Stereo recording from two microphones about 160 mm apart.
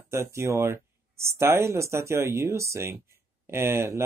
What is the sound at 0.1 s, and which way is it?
Speech, 15° right (ahead or behind).